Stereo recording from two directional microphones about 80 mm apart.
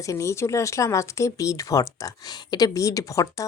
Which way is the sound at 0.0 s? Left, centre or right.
Left.